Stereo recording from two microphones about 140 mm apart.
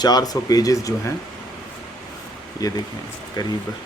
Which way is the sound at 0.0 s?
30° left (ahead or behind).